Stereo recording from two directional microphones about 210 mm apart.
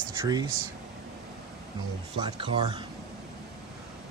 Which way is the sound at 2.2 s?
20° right (ahead or behind).